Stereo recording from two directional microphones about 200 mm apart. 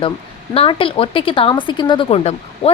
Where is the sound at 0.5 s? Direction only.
25° left (ahead or behind).